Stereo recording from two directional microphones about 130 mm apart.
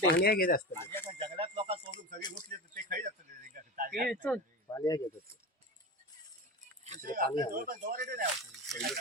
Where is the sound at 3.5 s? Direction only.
90° right.